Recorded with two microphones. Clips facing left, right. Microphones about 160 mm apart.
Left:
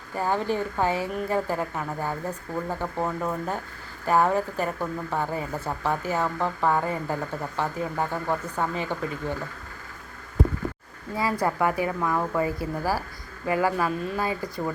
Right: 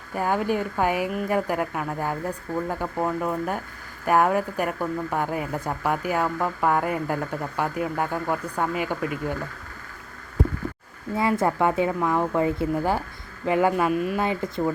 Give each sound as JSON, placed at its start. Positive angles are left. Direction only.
{"t": 0.1, "sound": "speech", "side_deg": -10}
{"t": 11.2, "sound": "speech", "side_deg": -20}